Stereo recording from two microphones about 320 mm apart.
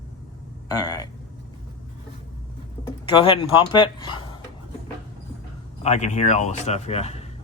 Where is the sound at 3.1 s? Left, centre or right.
Centre.